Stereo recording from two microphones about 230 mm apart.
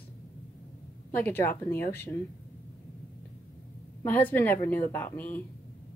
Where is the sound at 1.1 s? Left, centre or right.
Centre.